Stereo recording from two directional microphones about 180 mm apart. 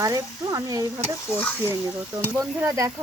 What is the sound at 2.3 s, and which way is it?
Stir, 15° right (ahead or behind).